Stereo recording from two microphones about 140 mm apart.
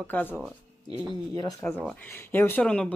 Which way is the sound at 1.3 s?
25° left (ahead or behind).